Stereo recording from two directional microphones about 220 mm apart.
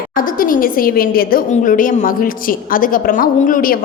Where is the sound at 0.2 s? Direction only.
40° left (ahead or behind).